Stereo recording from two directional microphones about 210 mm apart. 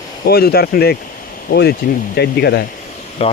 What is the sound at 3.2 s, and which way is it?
Speech, 25° left (ahead or behind).